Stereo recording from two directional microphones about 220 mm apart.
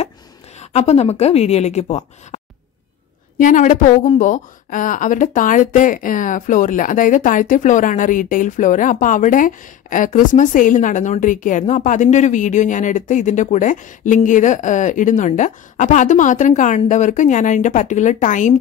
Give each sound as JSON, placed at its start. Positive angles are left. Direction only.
{"t": 0.6, "sound": "a woman's voice", "side_deg": 30}